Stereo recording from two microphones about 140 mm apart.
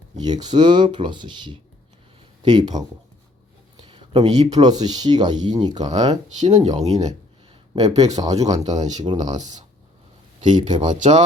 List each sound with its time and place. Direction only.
0.2 s speech: 30° right (ahead or behind)
3.8 s a sound: 40° right (ahead or behind)
4.3 s speech: 30° right (ahead or behind)
6.7 s speech: 55° right (ahead or behind)
7.8 s speech: 30° right (ahead or behind)
9.1 s speech: 55° right (ahead or behind)
10.4 s speech: 35° right (ahead or behind)
10.9 s speech: 60° right (ahead or behind)